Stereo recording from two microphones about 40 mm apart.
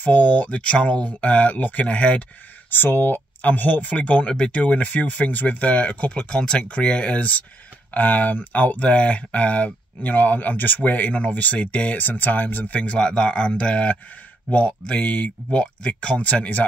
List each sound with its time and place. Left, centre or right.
0.0 s speech: left
2.7 s speech: left
3.9 s speech: left
12.0 s speech: left
13.0 s speech: left